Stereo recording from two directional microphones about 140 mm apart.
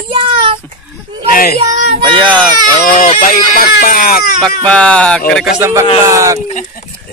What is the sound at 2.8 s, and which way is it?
Speech, 70° left (ahead or behind).